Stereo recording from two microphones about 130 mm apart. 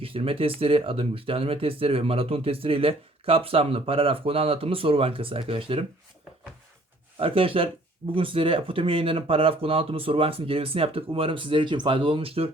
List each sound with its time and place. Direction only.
0.0 s speech: 45° right (ahead or behind)
7.2 s speech: 45° right (ahead or behind)